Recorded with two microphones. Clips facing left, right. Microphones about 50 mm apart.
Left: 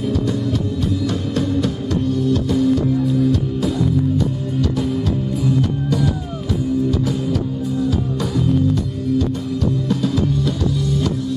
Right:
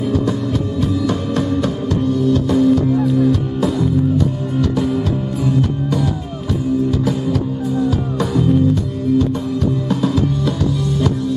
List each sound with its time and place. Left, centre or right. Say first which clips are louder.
1.0 s music: right 2 dB; centre
5.4 s music: right 2 dB; centre